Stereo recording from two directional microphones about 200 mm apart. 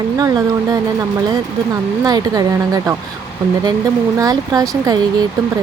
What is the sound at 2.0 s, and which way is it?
Speech, 20° right (ahead or behind).